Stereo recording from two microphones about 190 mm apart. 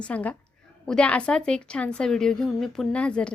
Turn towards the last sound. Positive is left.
turn(degrees=5)  # may be behind; listen again after turning